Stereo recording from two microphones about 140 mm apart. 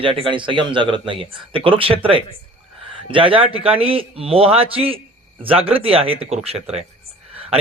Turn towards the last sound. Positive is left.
turn(degrees=-45)  # may be behind; listen again after turning